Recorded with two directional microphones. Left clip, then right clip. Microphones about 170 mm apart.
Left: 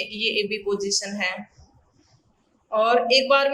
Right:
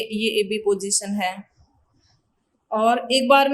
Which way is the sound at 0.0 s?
45° right (ahead or behind).